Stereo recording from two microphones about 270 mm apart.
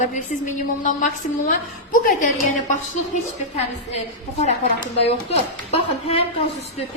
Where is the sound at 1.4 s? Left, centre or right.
Left.